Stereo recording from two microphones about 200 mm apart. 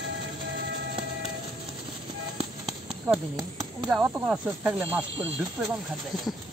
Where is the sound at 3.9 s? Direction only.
5° right (ahead or behind).